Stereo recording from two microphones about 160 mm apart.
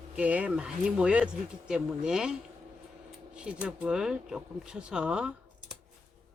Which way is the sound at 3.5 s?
5° right (ahead or behind).